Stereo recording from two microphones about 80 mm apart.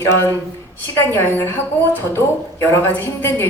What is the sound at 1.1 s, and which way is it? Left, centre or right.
A woman's voice, left.